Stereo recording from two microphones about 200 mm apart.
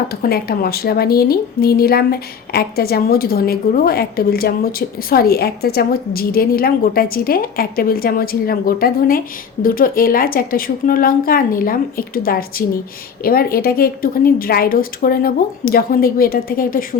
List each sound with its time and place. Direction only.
0.1 s speech: 50° left (ahead or behind)